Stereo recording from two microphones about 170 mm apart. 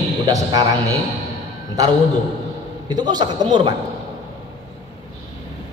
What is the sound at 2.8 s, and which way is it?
Speech, 25° right (ahead or behind).